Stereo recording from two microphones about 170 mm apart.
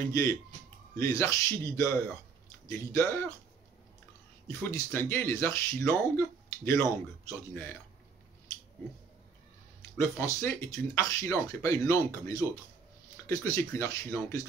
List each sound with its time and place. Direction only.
0.1 s speech: 20° left (ahead or behind)
2.9 s speech: 15° left (ahead or behind)
4.5 s speech: 15° left (ahead or behind)
9.9 s speech: 15° left (ahead or behind)